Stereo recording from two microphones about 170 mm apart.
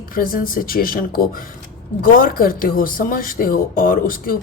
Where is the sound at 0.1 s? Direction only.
60° left (ahead or behind).